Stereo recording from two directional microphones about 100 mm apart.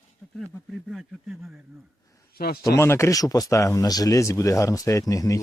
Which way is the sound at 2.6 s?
25° left (ahead or behind).